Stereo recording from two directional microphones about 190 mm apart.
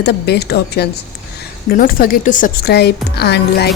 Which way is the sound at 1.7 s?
50° left (ahead or behind).